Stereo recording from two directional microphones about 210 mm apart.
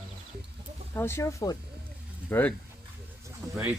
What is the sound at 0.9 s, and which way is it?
Speech, 10° left (ahead or behind).